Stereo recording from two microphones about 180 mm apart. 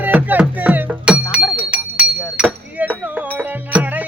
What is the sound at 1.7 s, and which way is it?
Chink, 5° right (ahead or behind).